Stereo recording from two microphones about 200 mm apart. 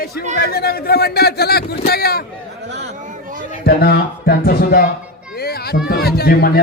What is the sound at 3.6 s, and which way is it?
A man's voice, 50° left (ahead or behind).